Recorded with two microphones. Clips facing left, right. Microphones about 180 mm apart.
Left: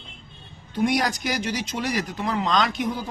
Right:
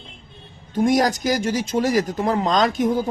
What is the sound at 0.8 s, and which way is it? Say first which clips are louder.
Speech: right 5 dB; 40° right (ahead or behind).